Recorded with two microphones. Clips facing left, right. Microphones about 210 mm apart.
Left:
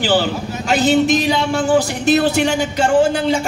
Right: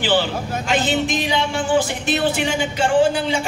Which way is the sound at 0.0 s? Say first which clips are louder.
Left 3 dB; 40° left (ahead or behind).